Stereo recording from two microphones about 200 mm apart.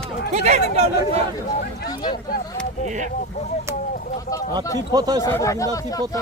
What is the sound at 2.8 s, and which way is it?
Speech, 40° right (ahead or behind).